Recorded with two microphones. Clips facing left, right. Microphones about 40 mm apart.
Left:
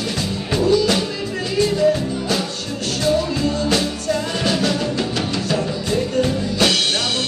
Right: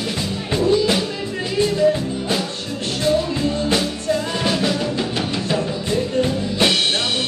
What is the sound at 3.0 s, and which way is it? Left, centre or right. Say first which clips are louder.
Music: even; right.